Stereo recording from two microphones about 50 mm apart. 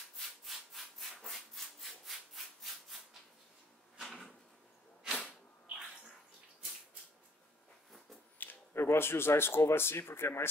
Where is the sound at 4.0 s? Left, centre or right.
Centre.